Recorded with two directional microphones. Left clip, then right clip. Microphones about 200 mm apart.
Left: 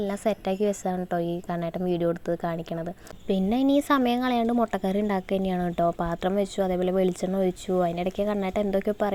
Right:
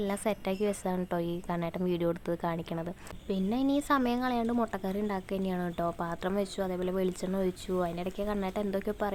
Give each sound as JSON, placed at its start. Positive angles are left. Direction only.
{"t": 0.0, "sound": "speech", "side_deg": 20}
{"t": 3.2, "sound": "speech", "side_deg": 30}